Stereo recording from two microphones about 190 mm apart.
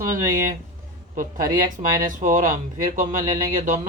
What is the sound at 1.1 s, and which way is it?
Speech, 45° right (ahead or behind).